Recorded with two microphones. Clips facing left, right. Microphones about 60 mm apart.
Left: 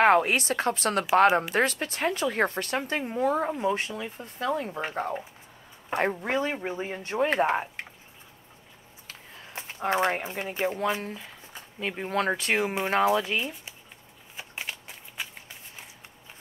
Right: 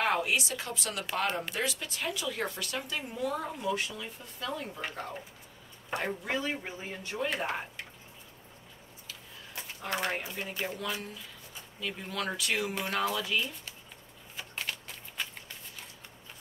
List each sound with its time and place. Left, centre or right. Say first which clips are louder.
0.0 s speech: left 8 dB; left
9.0 s speech: left 3 dB; left
14.3 s a sound: left 1 dB; centre